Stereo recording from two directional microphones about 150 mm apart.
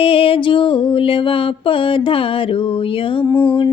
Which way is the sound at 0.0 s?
40° left (ahead or behind).